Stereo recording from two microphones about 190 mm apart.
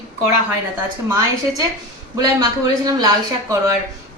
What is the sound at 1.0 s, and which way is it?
Speech, 20° right (ahead or behind).